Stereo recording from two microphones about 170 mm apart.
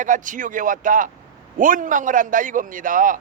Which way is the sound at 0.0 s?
50° right (ahead or behind).